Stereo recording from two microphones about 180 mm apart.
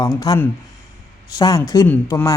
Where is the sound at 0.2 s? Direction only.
20° left (ahead or behind).